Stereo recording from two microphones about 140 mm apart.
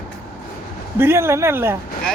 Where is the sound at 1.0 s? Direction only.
15° right (ahead or behind).